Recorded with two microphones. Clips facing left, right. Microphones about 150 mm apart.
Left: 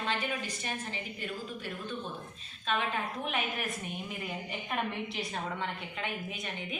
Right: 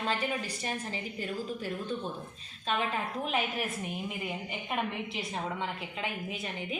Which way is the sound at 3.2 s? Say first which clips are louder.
Right 3 dB; 30° right (ahead or behind).